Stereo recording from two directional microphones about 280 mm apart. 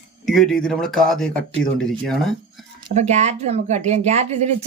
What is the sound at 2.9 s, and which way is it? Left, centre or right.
Speech, right.